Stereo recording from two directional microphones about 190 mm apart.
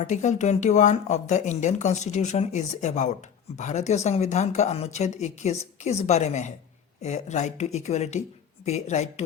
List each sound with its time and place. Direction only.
0.0 s speech: 40° left (ahead or behind)